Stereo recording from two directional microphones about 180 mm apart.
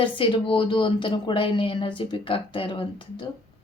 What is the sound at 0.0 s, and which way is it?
A woman's voice, 30° left (ahead or behind).